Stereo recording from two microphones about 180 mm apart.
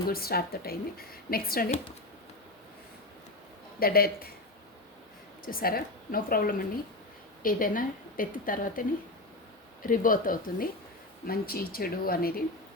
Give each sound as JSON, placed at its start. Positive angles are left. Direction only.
{"t": 0.1, "sound": "a woman's voice", "side_deg": 55}
{"t": 3.8, "sound": "a woman's voice", "side_deg": 55}
{"t": 5.5, "sound": "a woman's voice", "side_deg": 55}
{"t": 9.8, "sound": "a woman's voice", "side_deg": 50}